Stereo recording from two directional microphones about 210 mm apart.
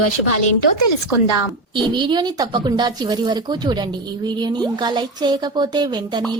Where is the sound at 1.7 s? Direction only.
20° right (ahead or behind).